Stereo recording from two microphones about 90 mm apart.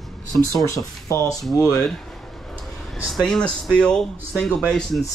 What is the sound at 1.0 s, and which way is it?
Speech, 40° left (ahead or behind).